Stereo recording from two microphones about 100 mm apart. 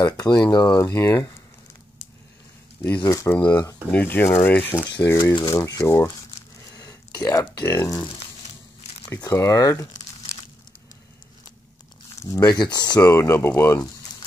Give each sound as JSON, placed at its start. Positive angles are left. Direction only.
{"t": 0.0, "sound": "speech", "side_deg": 40}
{"t": 3.0, "sound": "speech", "side_deg": 35}
{"t": 3.9, "sound": "speech", "side_deg": 15}
{"t": 5.0, "sound": "speech", "side_deg": 30}
{"t": 9.2, "sound": "speech", "side_deg": 30}
{"t": 12.2, "sound": "speech", "side_deg": 35}
{"t": 13.0, "sound": "speech", "side_deg": 25}